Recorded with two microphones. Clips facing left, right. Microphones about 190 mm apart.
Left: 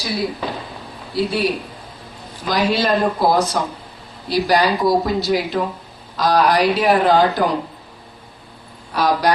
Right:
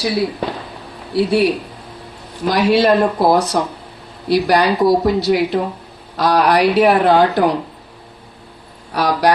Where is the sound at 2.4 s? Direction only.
60° right (ahead or behind).